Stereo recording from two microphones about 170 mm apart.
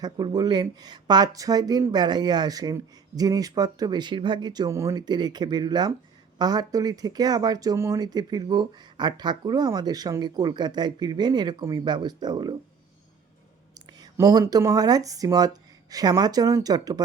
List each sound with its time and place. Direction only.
0.0 s speech: 25° right (ahead or behind)
13.7 s speech: 20° right (ahead or behind)